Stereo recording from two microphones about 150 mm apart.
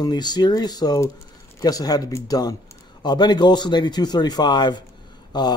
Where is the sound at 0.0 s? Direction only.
30° left (ahead or behind).